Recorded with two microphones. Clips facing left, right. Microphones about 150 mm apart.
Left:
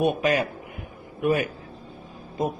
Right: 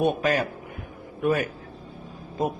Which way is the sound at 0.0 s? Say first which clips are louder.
Left 1 dB; 10° left (ahead or behind).